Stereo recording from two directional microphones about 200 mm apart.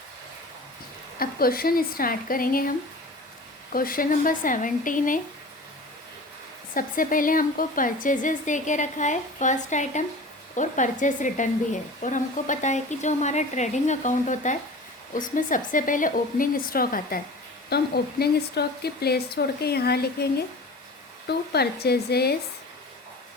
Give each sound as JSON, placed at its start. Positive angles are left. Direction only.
{"t": 1.2, "sound": "speech", "side_deg": 50}
{"t": 6.7, "sound": "speech", "side_deg": 45}
{"t": 21.2, "sound": "speech", "side_deg": 55}